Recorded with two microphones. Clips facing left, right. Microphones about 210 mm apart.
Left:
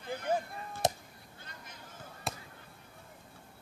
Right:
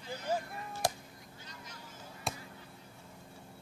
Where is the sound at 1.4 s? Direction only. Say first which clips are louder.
Even; 55° left (ahead or behind).